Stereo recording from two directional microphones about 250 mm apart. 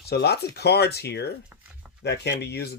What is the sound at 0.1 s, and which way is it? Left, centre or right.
Speech, left.